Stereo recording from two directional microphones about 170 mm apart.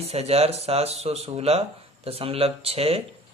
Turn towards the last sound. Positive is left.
turn(degrees=-35)  # may be behind; listen again after turning